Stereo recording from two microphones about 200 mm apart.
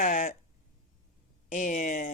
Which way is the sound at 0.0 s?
40° left (ahead or behind).